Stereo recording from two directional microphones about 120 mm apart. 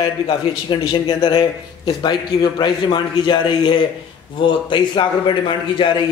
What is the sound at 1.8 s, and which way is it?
A man's voice, 35° left (ahead or behind).